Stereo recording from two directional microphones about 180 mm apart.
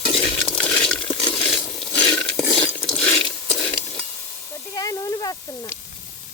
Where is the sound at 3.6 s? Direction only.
10° left (ahead or behind).